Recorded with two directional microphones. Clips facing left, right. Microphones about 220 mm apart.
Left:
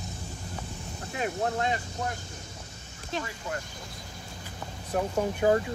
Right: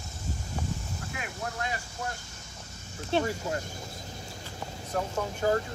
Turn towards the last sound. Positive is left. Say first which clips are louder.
# left 3 dB
turn(degrees=20)  # may be behind; listen again after turning